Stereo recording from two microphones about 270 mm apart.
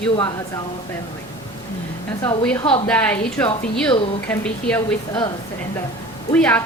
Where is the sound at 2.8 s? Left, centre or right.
Centre.